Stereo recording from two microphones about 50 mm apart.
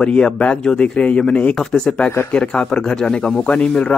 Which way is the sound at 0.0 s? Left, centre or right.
Centre.